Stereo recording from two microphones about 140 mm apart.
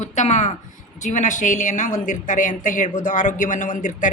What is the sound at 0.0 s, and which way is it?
A woman's voice, 60° left (ahead or behind).